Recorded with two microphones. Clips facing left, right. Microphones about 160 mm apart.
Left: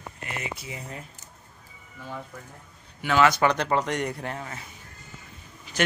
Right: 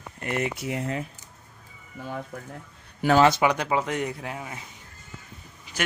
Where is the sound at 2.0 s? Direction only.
55° right (ahead or behind).